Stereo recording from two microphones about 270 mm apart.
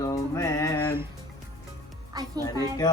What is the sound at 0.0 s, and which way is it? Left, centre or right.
Mantra, centre.